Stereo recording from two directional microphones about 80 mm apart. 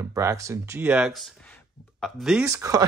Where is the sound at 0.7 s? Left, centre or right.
Centre.